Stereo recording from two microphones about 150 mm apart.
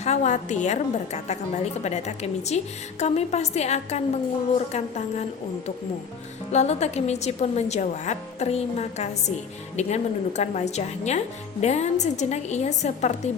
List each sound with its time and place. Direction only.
0.0 s a woman's voice: 50° left (ahead or behind)
6.5 s a woman's voice: 45° left (ahead or behind)